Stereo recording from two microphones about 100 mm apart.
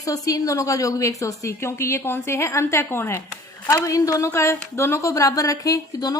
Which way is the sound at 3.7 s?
35° left (ahead or behind).